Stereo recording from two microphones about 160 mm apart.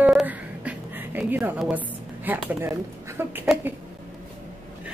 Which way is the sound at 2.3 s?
10° right (ahead or behind).